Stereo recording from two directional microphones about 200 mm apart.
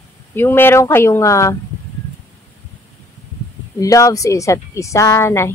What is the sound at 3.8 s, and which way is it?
A woman's voice, 15° left (ahead or behind).